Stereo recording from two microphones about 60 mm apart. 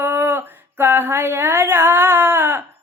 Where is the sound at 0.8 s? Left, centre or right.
Right.